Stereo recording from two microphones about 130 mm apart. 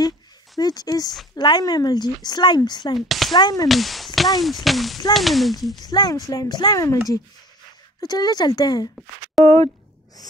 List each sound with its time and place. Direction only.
0.6 s speech: 30° left (ahead or behind)
3.0 s speech: centre (ahead or behind)
3.3 s speech: 35° left (ahead or behind)
3.6 s speech: centre (ahead or behind)
5.9 s speech: 30° left (ahead or behind)
8.0 s speech: 30° left (ahead or behind)
9.4 s speech: centre (ahead or behind)